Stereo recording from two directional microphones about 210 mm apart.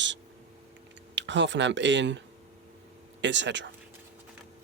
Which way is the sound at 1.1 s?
60° right (ahead or behind).